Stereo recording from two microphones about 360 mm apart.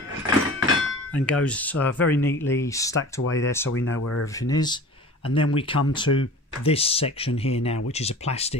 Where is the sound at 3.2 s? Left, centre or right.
Left.